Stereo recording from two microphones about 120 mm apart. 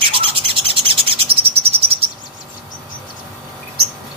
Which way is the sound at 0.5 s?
50° right (ahead or behind).